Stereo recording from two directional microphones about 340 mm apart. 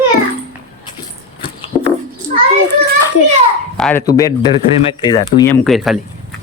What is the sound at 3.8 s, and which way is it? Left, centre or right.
Speech, centre.